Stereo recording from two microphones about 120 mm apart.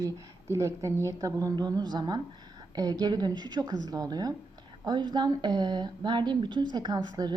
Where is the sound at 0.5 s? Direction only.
30° right (ahead or behind).